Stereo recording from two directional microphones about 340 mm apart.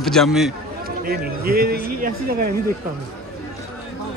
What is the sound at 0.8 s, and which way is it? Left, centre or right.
A man's voice, right.